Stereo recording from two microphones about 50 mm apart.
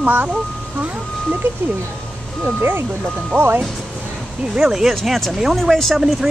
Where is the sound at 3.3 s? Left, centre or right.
Right.